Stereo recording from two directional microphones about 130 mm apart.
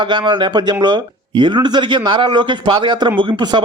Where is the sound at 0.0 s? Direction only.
35° right (ahead or behind).